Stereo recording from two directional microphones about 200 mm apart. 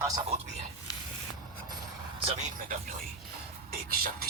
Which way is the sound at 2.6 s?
45° right (ahead or behind).